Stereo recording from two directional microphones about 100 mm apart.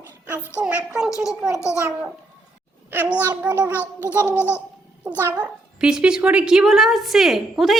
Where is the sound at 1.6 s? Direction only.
30° left (ahead or behind).